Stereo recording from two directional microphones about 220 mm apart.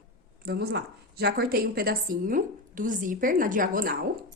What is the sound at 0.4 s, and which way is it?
A woman's voice, 45° right (ahead or behind).